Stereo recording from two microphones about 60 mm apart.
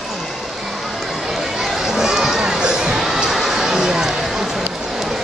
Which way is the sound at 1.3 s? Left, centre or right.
Centre.